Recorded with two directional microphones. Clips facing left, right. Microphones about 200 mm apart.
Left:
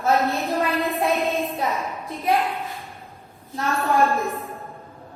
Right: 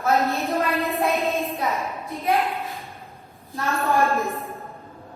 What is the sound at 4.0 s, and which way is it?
Speech, centre (ahead or behind).